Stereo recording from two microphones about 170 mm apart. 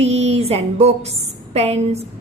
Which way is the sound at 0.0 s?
40° right (ahead or behind).